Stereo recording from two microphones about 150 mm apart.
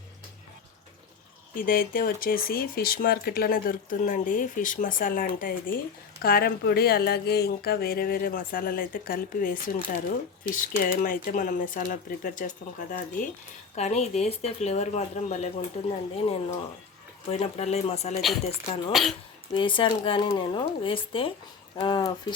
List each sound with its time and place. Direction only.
1.5 s speech: 75° left (ahead or behind)
6.2 s speech: 90° left; by 13.3 s 60° left (ahead or behind)
13.7 s speech: 45° left (ahead or behind)
18.9 s speech: centre (ahead or behind)
19.5 s speech: 35° left (ahead or behind)